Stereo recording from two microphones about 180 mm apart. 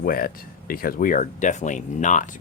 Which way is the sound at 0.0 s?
55° left (ahead or behind).